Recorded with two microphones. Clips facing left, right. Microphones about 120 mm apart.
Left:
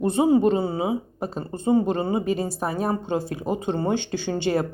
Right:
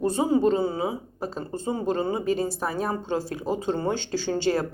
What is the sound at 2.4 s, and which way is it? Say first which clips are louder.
Speech: left 1 dB; 45° left (ahead or behind).